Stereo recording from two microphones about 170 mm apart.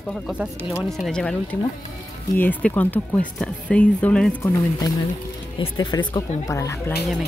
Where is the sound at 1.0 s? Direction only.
5° left (ahead or behind).